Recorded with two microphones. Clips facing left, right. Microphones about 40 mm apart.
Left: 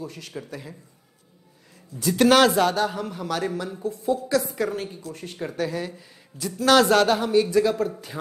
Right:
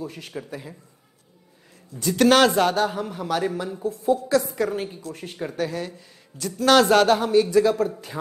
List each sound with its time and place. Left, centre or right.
0.0 s speech: centre
2.0 s speech: centre